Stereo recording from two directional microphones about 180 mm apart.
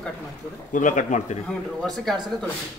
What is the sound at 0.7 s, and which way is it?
Speech, 45° left (ahead or behind).